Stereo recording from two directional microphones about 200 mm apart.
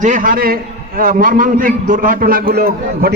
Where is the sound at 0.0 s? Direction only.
40° right (ahead or behind).